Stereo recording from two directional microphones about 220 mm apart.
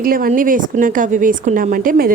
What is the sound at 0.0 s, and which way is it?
A woman's voice, 40° right (ahead or behind).